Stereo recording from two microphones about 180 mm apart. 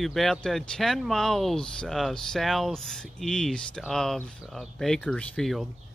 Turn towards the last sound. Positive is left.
turn(degrees=5)  # may be behind; listen again after turning